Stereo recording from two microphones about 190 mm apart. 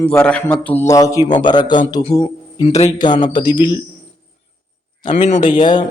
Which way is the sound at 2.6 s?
35° left (ahead or behind).